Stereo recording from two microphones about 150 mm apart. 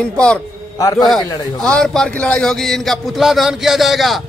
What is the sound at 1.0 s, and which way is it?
Speech, 5° left (ahead or behind).